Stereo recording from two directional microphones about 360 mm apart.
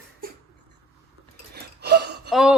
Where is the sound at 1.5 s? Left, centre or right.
Right.